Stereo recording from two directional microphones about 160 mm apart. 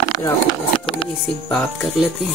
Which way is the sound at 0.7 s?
35° left (ahead or behind).